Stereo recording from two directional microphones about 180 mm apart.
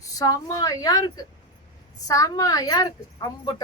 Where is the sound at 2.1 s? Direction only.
20° left (ahead or behind).